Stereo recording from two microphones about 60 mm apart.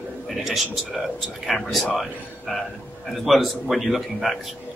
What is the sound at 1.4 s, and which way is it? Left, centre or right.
Speech, centre.